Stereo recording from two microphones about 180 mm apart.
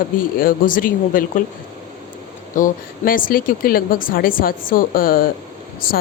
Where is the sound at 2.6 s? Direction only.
50° left (ahead or behind).